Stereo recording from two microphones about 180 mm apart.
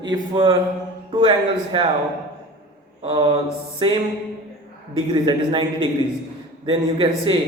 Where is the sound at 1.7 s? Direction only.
30° right (ahead or behind).